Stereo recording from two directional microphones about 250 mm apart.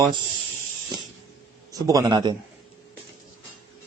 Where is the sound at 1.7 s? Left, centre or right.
Centre.